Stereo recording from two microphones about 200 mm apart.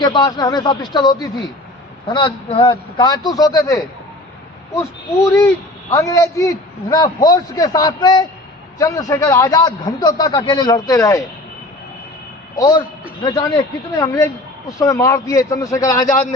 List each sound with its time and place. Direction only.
0.0 s a man's voice: 20° left (ahead or behind)
12.5 s a man's voice: 20° left (ahead or behind)